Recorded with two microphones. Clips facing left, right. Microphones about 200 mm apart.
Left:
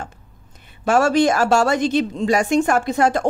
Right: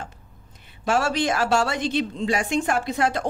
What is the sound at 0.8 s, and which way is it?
A woman's voice, 45° left (ahead or behind).